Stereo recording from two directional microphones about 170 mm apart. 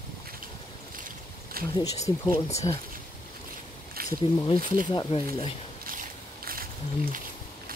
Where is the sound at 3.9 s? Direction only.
55° right (ahead or behind).